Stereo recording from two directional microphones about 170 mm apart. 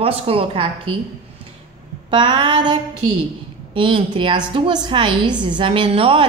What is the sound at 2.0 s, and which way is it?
A woman's voice, 30° right (ahead or behind).